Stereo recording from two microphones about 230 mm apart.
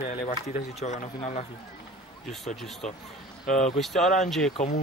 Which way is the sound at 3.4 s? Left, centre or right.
Left.